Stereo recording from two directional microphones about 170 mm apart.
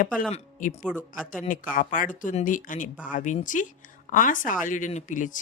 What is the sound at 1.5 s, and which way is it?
Speech, 50° left (ahead or behind).